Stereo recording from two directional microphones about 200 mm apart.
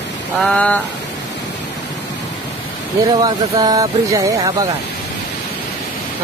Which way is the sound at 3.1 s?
20° right (ahead or behind).